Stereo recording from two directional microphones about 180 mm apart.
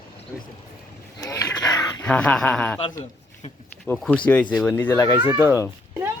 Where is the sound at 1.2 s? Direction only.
20° left (ahead or behind).